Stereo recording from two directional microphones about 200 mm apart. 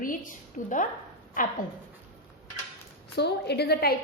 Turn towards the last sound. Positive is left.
turn(degrees=50)  # may be behind; listen again after turning